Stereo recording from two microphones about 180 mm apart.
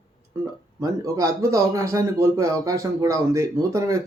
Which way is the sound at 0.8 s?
20° right (ahead or behind).